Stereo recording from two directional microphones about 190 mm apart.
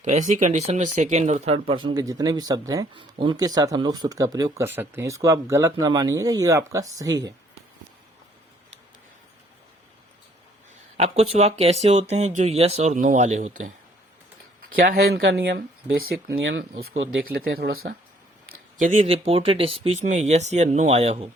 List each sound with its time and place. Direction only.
0.0 s speech: 40° right (ahead or behind); by 7.3 s 20° right (ahead or behind)
10.9 s speech: 35° right (ahead or behind)
14.8 s speech: 50° right (ahead or behind)
16.4 s speech: 75° right (ahead or behind)
17.2 s speech: 55° right (ahead or behind)
18.8 s speech: 30° right (ahead or behind)